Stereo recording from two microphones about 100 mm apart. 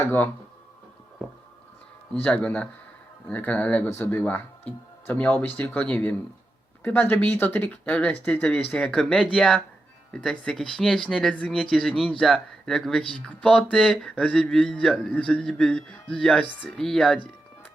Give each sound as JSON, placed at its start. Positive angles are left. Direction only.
{"t": 0.0, "sound": "speech", "side_deg": 20}
{"t": 2.1, "sound": "speech", "side_deg": 10}